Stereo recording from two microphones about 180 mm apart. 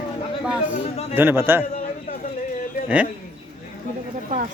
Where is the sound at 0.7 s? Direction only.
40° left (ahead or behind).